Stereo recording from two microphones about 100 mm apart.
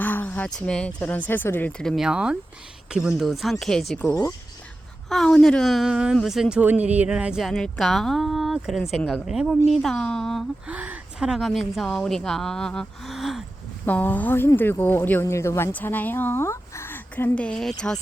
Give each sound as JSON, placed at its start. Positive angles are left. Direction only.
{"t": 0.0, "sound": "a sound", "side_deg": 20}
{"t": 0.5, "sound": "speech", "side_deg": 10}
{"t": 2.0, "sound": "speech", "side_deg": -10}
{"t": 5.0, "sound": "speech", "side_deg": 5}
{"t": 6.6, "sound": "speech", "side_deg": -15}
{"t": 9.0, "sound": "speech", "side_deg": 10}
{"t": 9.2, "sound": "speech", "side_deg": -5}
{"t": 10.7, "sound": "speech", "side_deg": -15}
{"t": 13.8, "sound": "speech", "side_deg": 20}